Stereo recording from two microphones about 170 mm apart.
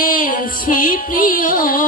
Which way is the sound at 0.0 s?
55° left (ahead or behind).